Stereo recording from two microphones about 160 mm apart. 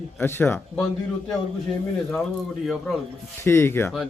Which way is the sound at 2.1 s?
5° left (ahead or behind).